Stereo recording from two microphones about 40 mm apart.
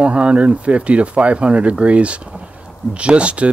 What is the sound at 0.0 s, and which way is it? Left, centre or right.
Speech, right.